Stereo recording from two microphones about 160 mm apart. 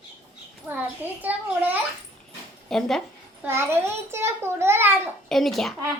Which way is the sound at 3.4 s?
15° right (ahead or behind).